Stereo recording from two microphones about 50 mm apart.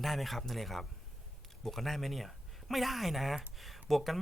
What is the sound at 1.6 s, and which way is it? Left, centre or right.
Speech, centre.